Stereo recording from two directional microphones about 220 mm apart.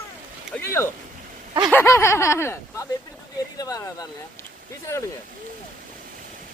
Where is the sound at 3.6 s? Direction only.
15° left (ahead or behind).